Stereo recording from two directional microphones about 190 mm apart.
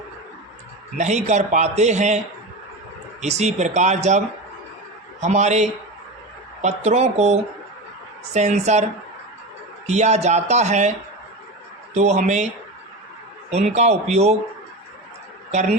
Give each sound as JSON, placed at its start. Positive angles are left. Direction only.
{"t": 0.9, "sound": "a man's voice", "side_deg": -35}
{"t": 5.2, "sound": "a man's voice", "side_deg": -40}
{"t": 11.9, "sound": "a man's voice", "side_deg": -35}
{"t": 13.5, "sound": "a man's voice", "side_deg": -35}